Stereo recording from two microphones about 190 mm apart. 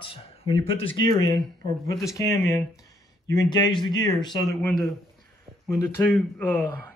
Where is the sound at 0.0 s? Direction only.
30° left (ahead or behind).